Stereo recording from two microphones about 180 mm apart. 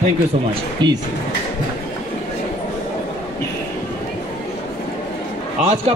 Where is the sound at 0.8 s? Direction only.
25° right (ahead or behind).